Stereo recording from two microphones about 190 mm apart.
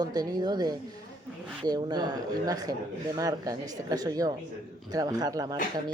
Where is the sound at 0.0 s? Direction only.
20° right (ahead or behind).